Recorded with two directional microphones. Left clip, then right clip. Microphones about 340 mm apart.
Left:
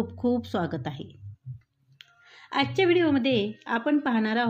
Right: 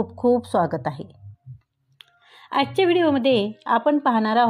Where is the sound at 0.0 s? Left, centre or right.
Centre.